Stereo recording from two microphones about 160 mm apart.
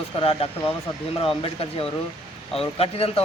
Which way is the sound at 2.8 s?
40° left (ahead or behind).